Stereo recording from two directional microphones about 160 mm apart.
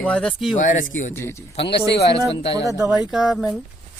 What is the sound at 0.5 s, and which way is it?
Speech, 55° left (ahead or behind).